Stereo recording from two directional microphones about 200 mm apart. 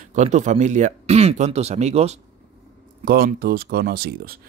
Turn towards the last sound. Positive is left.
turn(degrees=-50)  # may be behind; listen again after turning